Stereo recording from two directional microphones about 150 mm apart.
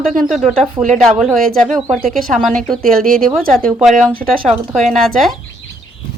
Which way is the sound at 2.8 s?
75° right (ahead or behind).